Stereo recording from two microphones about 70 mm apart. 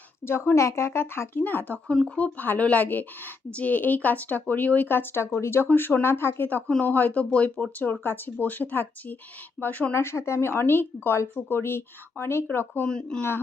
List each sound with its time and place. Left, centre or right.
0.3 s a woman's voice: left
6.7 s a woman's voice: centre
9.9 s a woman's voice: left
12.9 s speech: centre